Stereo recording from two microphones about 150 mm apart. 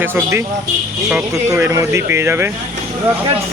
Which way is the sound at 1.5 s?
20° right (ahead or behind).